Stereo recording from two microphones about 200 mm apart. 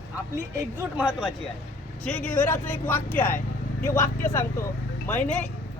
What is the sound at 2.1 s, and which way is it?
A man's voice, 10° left (ahead or behind).